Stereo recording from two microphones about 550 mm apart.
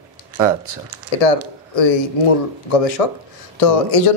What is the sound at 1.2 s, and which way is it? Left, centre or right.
Speech, left.